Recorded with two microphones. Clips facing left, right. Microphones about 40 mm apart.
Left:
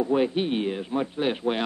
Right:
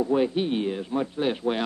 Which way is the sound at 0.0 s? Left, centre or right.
Left.